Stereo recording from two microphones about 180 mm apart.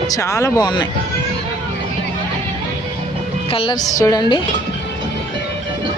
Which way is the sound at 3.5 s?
30° left (ahead or behind).